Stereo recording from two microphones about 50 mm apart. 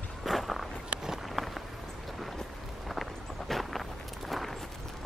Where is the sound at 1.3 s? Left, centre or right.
Centre.